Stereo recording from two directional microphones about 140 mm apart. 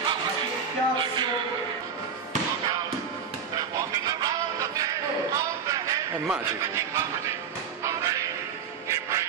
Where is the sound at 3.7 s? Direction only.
25° right (ahead or behind).